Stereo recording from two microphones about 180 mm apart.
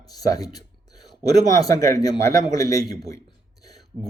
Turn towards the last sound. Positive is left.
turn(degrees=20)  # may be behind; listen again after turning